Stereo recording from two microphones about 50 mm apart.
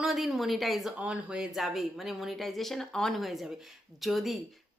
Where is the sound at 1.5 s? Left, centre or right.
Centre.